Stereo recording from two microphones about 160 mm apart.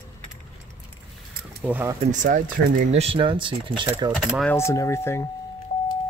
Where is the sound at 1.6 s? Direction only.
10° right (ahead or behind).